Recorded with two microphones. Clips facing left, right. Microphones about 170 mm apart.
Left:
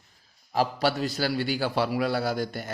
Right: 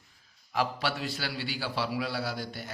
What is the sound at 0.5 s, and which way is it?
A man's voice, 35° left (ahead or behind).